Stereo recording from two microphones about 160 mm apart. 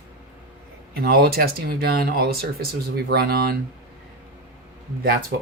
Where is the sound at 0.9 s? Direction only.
75° right (ahead or behind).